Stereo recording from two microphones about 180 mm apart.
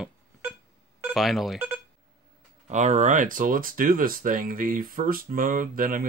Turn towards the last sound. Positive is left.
turn(degrees=-50)  # may be behind; listen again after turning